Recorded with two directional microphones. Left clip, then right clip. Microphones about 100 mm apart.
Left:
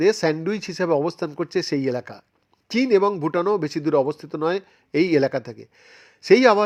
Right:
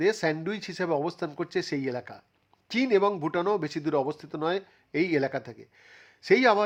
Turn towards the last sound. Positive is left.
turn(degrees=30)  # may be behind; listen again after turning